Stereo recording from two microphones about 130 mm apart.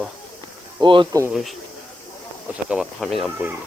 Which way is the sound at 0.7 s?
40° right (ahead or behind).